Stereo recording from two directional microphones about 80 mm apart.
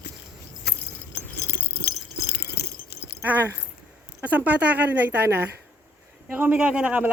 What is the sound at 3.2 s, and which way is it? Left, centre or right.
A man's voice, right.